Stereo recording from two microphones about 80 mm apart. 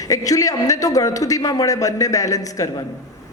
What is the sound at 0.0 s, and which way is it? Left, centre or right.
A woman's voice, left.